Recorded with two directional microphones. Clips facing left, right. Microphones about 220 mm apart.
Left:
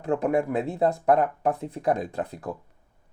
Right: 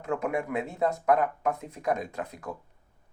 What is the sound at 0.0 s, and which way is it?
Speech, 35° left (ahead or behind).